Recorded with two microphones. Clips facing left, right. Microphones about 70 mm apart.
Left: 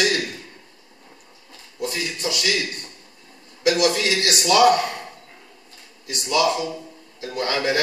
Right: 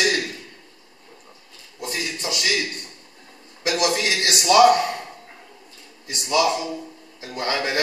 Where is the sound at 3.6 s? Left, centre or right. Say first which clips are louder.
Left 3 dB; right.